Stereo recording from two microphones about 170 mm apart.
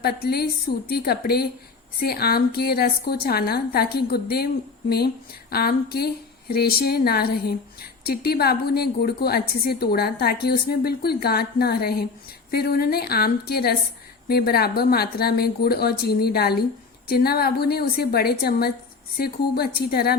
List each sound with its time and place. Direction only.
0.0 s speech: 65° left (ahead or behind)